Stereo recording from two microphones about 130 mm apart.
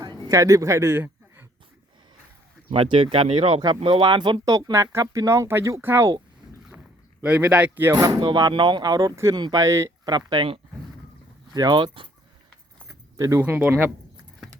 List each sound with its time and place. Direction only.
0.0 s a sound: 30° right (ahead or behind)
2.6 s speech: 40° right (ahead or behind); by 6.1 s 20° right (ahead or behind)
7.2 s speech: 10° right (ahead or behind)
7.9 s speech: 30° right (ahead or behind)
10.2 s speech: 35° right (ahead or behind)
13.1 s speech: 25° right (ahead or behind)
13.4 s speech: 15° right (ahead or behind)